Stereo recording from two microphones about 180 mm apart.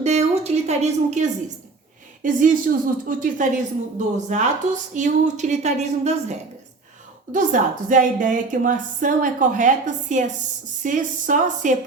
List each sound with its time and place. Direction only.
0.0 s a sound: 35° right (ahead or behind)
2.2 s a woman's voice: 50° right (ahead or behind)
7.3 s a woman's voice: 45° right (ahead or behind)